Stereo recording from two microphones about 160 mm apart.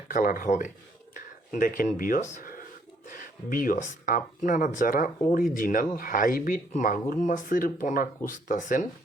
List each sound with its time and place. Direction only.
0.1 s speech: 60° left (ahead or behind)